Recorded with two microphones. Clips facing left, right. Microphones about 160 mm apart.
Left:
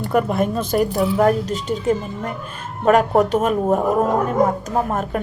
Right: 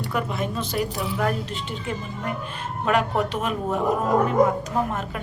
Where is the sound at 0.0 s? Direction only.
50° left (ahead or behind).